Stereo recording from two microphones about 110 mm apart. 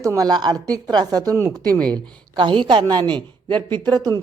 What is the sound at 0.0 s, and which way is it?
A man's voice, 30° right (ahead or behind).